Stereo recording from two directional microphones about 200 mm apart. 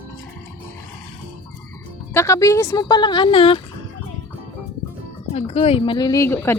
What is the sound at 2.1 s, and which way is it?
A woman's voice, 15° left (ahead or behind).